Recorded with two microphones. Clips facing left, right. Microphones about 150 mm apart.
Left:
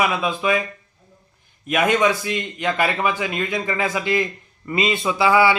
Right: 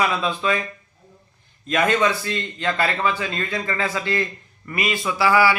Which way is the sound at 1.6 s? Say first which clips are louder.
Left 1 dB; 15° left (ahead or behind).